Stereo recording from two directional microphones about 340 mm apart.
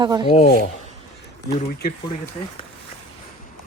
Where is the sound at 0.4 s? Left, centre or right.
Left.